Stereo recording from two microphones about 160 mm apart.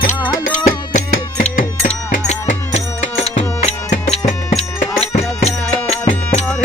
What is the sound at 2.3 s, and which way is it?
Music, 45° left (ahead or behind).